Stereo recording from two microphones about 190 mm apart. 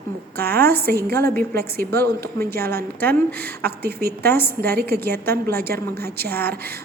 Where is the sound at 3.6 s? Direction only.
55° right (ahead or behind).